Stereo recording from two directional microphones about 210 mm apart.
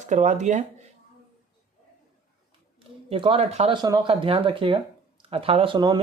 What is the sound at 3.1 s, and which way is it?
Speech, 25° right (ahead or behind).